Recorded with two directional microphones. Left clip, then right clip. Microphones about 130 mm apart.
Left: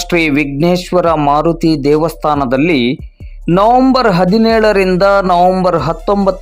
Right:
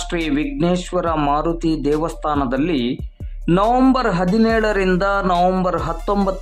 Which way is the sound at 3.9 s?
35° left (ahead or behind).